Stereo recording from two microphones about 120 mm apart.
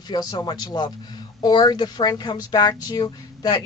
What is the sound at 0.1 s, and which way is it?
Speech, 35° left (ahead or behind).